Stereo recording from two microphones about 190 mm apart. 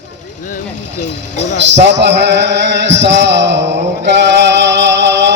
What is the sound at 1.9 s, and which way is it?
Chant, 65° right (ahead or behind).